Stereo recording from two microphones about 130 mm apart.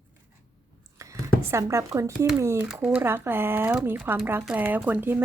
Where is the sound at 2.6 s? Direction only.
5° right (ahead or behind).